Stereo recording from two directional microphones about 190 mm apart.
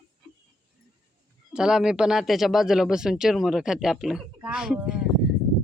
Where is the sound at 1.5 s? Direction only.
5° right (ahead or behind).